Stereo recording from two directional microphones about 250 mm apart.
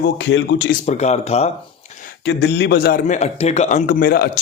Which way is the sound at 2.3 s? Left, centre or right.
Left.